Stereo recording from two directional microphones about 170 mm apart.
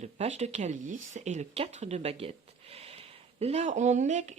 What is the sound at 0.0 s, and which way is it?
Speech, 40° right (ahead or behind).